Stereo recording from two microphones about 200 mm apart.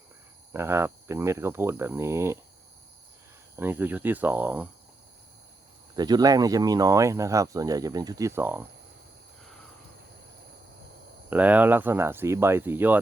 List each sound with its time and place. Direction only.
0.5 s speech: 15° right (ahead or behind)
3.5 s speech: 10° right (ahead or behind)
6.0 s speech: 20° right (ahead or behind)
11.3 s speech: 10° right (ahead or behind)